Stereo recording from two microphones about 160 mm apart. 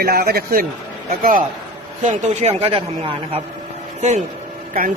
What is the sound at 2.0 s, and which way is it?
Speech, 50° right (ahead or behind).